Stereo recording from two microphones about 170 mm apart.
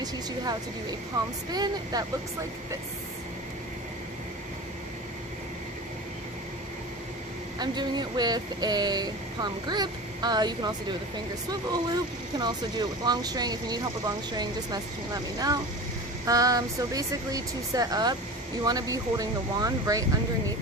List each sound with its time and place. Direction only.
0.0 s speech: 25° right (ahead or behind)
7.6 s speech: 25° right (ahead or behind)